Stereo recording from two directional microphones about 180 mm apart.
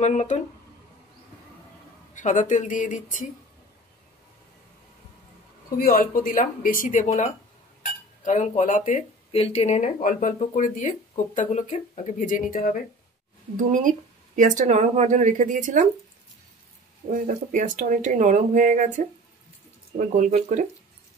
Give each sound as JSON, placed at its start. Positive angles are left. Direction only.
{"t": 0.0, "sound": "speech", "side_deg": 40}
{"t": 2.1, "sound": "speech", "side_deg": 45}
{"t": 5.8, "sound": "speech", "side_deg": 55}
{"t": 13.6, "sound": "speech", "side_deg": -45}
{"t": 17.1, "sound": "speech", "side_deg": -50}
{"t": 20.0, "sound": "speech", "side_deg": -45}